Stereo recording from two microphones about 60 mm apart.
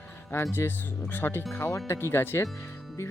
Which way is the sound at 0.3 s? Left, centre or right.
Left.